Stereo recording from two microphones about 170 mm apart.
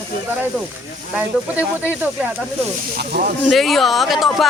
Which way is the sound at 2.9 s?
65° right (ahead or behind).